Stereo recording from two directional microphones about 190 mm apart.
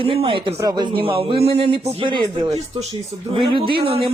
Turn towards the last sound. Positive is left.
turn(degrees=-30)  # may be behind; listen again after turning